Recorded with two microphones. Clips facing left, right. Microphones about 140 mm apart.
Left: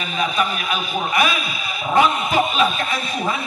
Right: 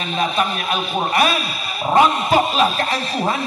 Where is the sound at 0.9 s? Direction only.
35° right (ahead or behind).